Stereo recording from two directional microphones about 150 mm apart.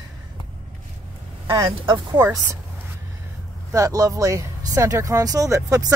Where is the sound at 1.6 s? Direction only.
35° right (ahead or behind).